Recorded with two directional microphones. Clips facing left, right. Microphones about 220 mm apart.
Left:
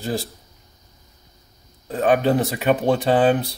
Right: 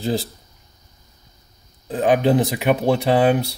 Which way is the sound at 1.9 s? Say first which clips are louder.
Right 1 dB; 15° right (ahead or behind).